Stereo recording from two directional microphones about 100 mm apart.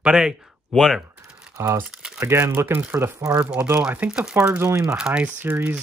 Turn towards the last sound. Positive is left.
turn(degrees=-20)  # may be behind; listen again after turning